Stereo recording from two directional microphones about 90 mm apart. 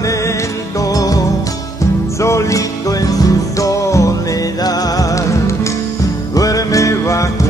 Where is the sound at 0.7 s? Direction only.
40° left (ahead or behind).